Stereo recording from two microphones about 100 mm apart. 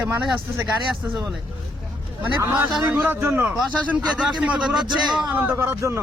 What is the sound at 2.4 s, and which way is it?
A man's voice, 25° right (ahead or behind).